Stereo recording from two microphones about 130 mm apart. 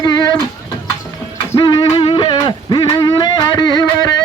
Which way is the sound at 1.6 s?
35° left (ahead or behind).